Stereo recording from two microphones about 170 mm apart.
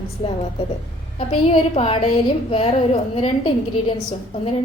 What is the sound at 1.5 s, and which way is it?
A woman's voice, 35° left (ahead or behind).